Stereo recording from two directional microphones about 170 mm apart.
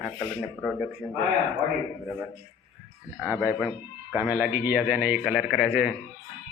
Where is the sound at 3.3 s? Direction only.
5° right (ahead or behind).